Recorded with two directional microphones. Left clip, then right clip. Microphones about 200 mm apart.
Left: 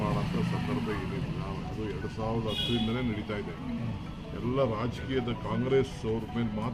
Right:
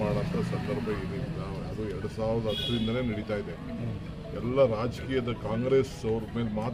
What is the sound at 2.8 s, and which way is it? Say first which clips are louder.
Speech: right 2 dB; 20° right (ahead or behind).